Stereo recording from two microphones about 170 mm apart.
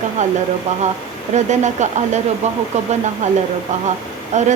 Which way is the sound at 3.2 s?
45° right (ahead or behind).